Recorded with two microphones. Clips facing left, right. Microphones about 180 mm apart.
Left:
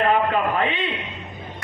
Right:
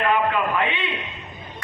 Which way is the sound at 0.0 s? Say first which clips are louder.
Left 2 dB; 40° left (ahead or behind).